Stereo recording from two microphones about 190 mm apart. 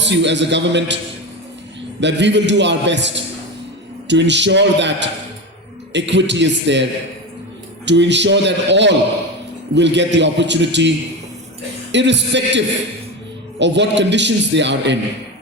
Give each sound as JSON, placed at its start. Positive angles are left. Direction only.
{"t": 0.0, "sound": "a man's voice", "side_deg": -70}
{"t": 2.0, "sound": "a man's voice", "side_deg": -70}
{"t": 4.1, "sound": "a man's voice", "side_deg": -70}
{"t": 7.9, "sound": "a man's voice", "side_deg": -70}